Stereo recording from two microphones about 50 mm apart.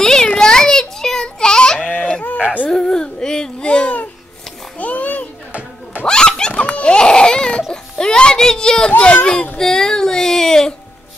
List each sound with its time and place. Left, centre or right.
0.0 s a sound: centre
1.9 s honk: left
2.7 s whimper: centre
3.6 s babbling: left
4.7 s a sound: left
5.5 s music: right
6.0 s laughter: centre
7.7 s a sound: centre
9.2 s a child's voice: centre
9.6 s child singing: centre